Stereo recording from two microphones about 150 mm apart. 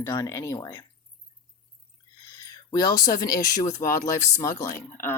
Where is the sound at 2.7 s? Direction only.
25° left (ahead or behind).